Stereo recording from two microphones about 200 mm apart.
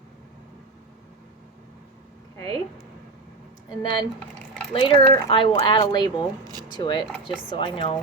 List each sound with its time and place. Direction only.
3.7 s speech: 20° left (ahead or behind)
7.0 s speech: centre (ahead or behind)
7.5 s speech: 25° left (ahead or behind)